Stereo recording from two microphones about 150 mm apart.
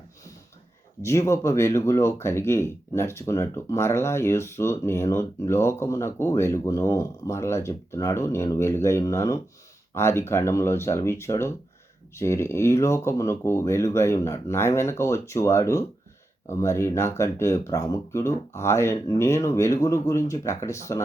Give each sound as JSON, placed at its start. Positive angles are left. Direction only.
{"t": 1.0, "sound": "speech", "side_deg": 20}